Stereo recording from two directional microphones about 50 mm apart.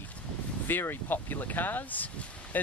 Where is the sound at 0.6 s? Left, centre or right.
Left.